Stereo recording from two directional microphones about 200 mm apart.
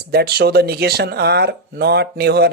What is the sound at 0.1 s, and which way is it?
Speech, 50° right (ahead or behind).